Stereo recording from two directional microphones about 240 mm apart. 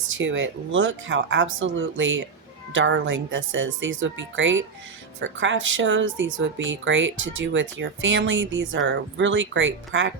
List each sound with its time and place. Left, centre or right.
0.1 s speech: right